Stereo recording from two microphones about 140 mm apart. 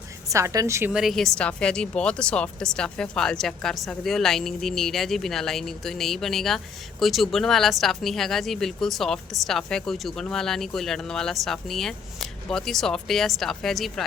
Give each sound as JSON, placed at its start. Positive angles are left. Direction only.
{"t": 0.3, "sound": "a woman's voice", "side_deg": -20}
{"t": 0.9, "sound": "speech", "side_deg": 0}